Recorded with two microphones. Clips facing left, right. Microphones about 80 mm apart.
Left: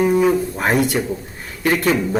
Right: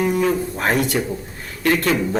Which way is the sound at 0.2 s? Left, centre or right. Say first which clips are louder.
Left 3 dB; centre.